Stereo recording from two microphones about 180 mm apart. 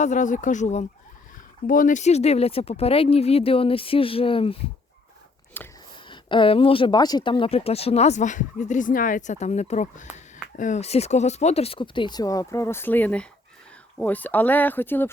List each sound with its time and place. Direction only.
0.0 s speech: 45° left (ahead or behind)
5.6 s a sound: 10° left (ahead or behind)
6.1 s speech: 25° left (ahead or behind); by 15.1 s 10° left (ahead or behind)